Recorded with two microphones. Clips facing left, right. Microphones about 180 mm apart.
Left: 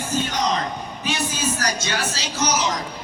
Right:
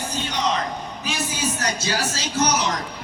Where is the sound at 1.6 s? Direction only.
35° right (ahead or behind); by 2.7 s 60° right (ahead or behind).